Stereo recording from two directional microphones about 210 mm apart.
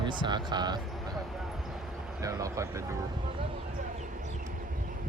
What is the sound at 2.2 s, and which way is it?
Speech, 15° right (ahead or behind).